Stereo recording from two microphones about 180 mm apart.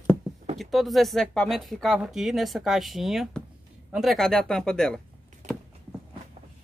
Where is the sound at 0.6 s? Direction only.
Centre (ahead or behind).